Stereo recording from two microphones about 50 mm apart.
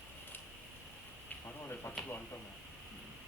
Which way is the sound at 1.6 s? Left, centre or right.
Left.